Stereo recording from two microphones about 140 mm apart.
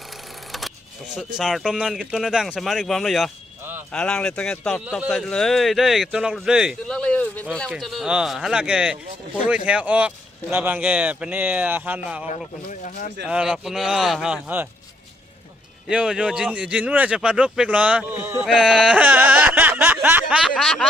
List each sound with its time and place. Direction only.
1.1 s speech: centre (ahead or behind)
4.9 s speech: 5° right (ahead or behind)
5.1 s speech: 5° left (ahead or behind); by 11.9 s 10° right (ahead or behind)
12.6 s speech: 65° left (ahead or behind)
13.2 s speech: 5° right (ahead or behind)
15.9 s speech: 5° right (ahead or behind)
18.4 s a sound: 5° right (ahead or behind)
20.5 s speech: centre (ahead or behind)